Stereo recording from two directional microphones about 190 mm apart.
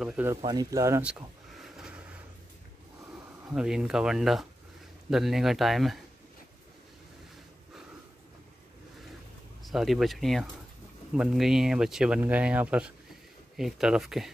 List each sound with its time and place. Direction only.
0.0 s speech: 10° right (ahead or behind)
0.4 s speech: 20° right (ahead or behind)
1.6 s a sound: 5° right (ahead or behind)
3.4 s speech: 5° right (ahead or behind)
9.6 s speech: centre (ahead or behind)